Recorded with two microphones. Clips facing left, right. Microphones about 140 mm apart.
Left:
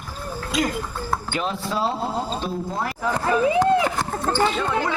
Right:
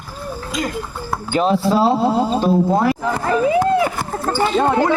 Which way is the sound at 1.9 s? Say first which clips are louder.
Right 9 dB; 90° right.